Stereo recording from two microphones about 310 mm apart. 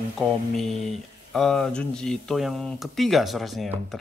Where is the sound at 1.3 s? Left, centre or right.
Centre.